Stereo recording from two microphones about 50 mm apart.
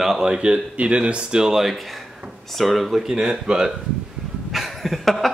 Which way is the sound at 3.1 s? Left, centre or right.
Centre.